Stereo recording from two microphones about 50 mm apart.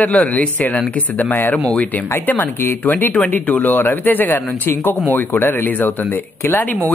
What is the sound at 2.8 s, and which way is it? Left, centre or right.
Speech, left.